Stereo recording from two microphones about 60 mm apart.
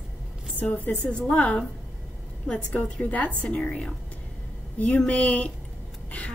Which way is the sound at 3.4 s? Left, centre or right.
Centre.